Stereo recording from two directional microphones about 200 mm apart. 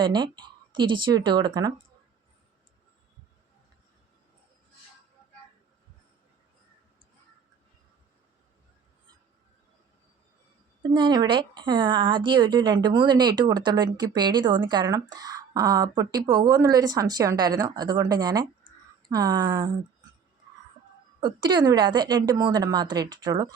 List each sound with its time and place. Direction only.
0.0 s a woman's voice: 20° right (ahead or behind)
10.9 s a woman's voice: 20° right (ahead or behind)
21.2 s a woman's voice: 20° right (ahead or behind)